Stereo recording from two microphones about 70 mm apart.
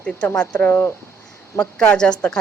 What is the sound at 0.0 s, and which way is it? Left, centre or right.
Speech, centre.